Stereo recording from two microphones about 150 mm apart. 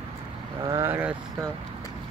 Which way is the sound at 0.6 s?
25° right (ahead or behind).